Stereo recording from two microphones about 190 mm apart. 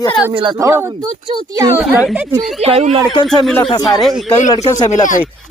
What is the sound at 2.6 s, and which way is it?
Speech, 35° right (ahead or behind).